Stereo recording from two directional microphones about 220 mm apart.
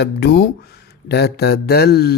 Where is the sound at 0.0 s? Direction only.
45° left (ahead or behind).